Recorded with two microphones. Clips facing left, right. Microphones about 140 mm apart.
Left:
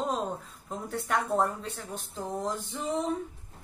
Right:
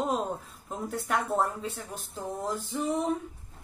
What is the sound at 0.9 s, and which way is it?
A woman's voice, centre (ahead or behind).